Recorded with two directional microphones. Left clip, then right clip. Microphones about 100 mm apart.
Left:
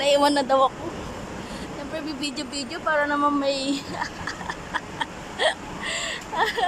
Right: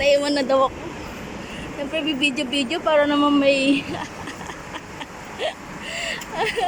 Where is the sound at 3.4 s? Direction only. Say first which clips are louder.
Right 7 dB; 85° left.